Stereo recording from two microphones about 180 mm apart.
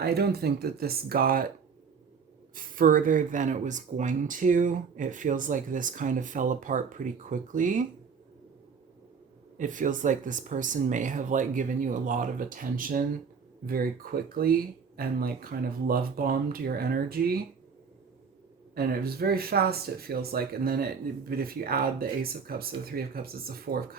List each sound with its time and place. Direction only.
0.0 s speech: 60° right (ahead or behind)
2.6 s speech: 50° right (ahead or behind)
9.6 s speech: 45° right (ahead or behind)
18.7 s speech: 60° right (ahead or behind)